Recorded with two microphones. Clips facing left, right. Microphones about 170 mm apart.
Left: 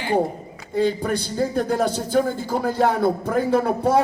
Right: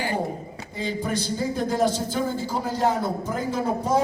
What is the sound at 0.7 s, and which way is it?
Speech, 60° left (ahead or behind).